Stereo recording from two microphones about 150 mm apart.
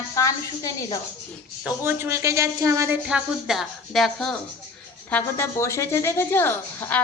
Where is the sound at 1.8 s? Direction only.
15° right (ahead or behind).